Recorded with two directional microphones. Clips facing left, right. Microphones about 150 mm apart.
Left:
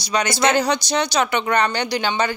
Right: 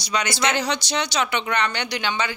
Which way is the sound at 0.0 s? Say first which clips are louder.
Left 5 dB; 40° left (ahead or behind).